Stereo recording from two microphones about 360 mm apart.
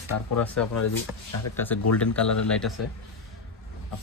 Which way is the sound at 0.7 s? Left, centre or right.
Left.